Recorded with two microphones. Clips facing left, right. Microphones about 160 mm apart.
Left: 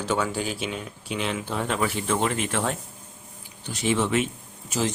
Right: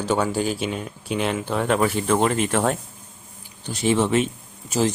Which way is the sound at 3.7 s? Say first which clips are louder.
Right 4 dB; 35° right (ahead or behind).